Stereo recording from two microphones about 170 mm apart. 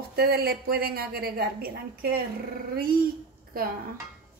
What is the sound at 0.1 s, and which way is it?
A woman's voice, 65° right (ahead or behind).